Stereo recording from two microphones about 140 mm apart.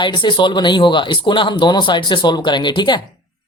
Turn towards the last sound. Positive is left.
turn(degrees=35)  # may be behind; listen again after turning